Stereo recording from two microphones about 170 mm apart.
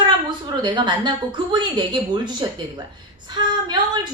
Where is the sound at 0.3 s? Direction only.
25° right (ahead or behind).